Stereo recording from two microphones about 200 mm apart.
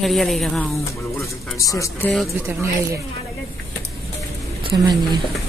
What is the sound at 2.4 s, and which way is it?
Speech, 15° right (ahead or behind).